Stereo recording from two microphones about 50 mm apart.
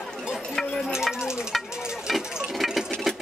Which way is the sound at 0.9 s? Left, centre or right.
Centre.